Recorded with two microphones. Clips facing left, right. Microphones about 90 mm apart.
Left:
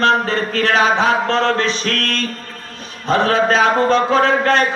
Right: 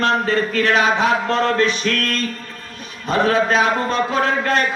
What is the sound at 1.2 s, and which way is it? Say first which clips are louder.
Speech: left 2 dB; 90° left.